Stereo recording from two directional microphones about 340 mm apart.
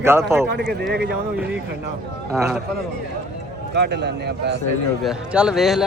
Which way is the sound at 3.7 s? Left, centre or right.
Right.